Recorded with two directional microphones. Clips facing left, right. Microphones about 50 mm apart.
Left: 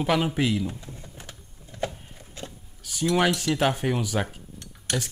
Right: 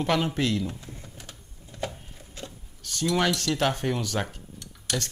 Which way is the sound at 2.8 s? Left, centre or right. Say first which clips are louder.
Left 2 dB; centre.